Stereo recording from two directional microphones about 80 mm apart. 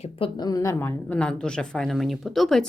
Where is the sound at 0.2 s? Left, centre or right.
Left.